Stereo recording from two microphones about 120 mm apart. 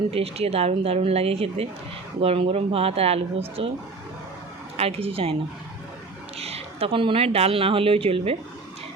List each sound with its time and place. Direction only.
0.1 s speech: 55° right (ahead or behind)
4.8 s speech: 55° right (ahead or behind)
6.4 s speech: 55° right (ahead or behind)